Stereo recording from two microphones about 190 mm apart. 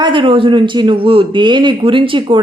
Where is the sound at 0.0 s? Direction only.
25° right (ahead or behind).